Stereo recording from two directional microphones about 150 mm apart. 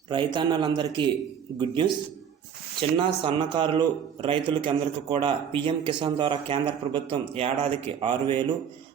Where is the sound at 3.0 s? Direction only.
35° right (ahead or behind).